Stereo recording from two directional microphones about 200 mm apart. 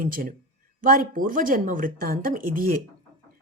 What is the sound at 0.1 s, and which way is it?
Speech, 45° right (ahead or behind).